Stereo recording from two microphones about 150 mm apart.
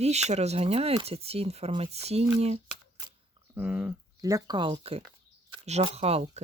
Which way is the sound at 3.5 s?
10° right (ahead or behind).